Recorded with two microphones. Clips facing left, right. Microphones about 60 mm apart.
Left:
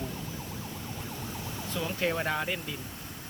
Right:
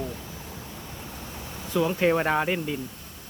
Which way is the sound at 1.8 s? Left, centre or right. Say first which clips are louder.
Right 8 dB; right.